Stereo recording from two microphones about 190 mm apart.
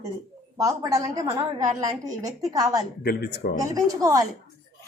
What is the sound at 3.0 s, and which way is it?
Speech, 55° left (ahead or behind).